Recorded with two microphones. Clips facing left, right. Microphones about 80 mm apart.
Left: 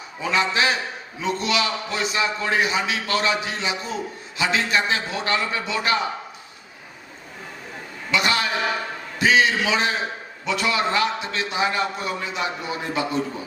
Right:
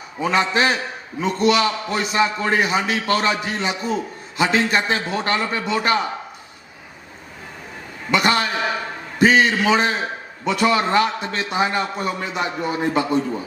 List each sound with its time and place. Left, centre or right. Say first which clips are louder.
0.2 s a man's voice: right 3 dB; right
8.1 s a man's voice: right 3 dB; right